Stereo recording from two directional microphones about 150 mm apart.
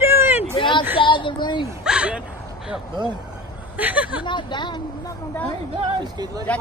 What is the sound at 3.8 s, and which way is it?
Speech, 10° right (ahead or behind).